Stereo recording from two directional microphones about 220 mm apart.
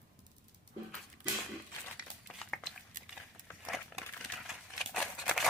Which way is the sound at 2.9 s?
40° right (ahead or behind).